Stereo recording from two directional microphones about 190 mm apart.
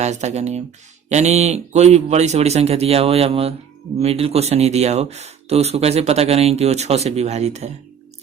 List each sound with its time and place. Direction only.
0.0 s speech: 35° right (ahead or behind)